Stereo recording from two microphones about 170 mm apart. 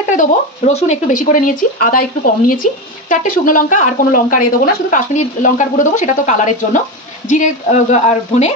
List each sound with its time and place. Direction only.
0.1 s speech: 45° left (ahead or behind)